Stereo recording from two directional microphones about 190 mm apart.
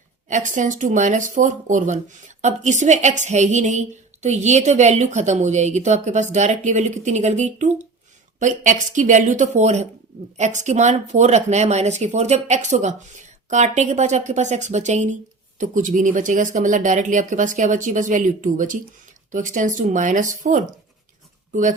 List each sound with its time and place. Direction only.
0.3 s speech: 40° right (ahead or behind)